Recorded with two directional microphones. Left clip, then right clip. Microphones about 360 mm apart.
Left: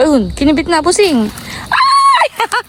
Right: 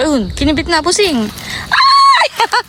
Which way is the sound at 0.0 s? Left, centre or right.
Centre.